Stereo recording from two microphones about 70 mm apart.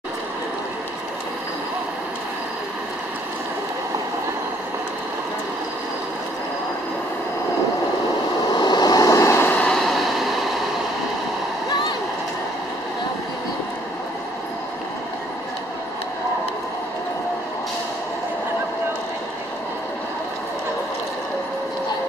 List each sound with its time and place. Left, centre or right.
8.5 s vehicle: left
9.1 s vehicle: left
9.4 s vehicle: left
9.7 s a sound: centre